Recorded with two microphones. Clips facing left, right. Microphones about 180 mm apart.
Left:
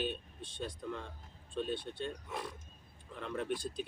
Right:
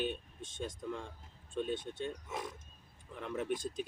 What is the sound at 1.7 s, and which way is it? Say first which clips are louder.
Speech: right 1 dB; 45° right (ahead or behind).